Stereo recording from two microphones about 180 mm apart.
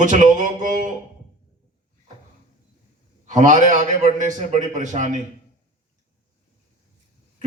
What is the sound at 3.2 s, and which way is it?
A man's voice, 45° right (ahead or behind).